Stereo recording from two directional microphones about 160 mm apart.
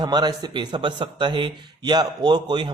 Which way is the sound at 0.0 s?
25° right (ahead or behind).